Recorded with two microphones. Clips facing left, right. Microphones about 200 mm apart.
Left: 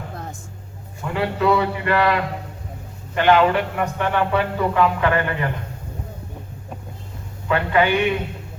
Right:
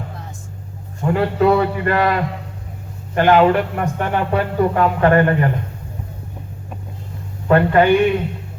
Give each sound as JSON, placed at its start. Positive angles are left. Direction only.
{"t": 1.0, "sound": "speech", "side_deg": -45}
{"t": 7.4, "sound": "a man's voice", "side_deg": -45}